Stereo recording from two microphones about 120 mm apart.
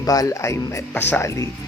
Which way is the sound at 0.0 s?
30° left (ahead or behind).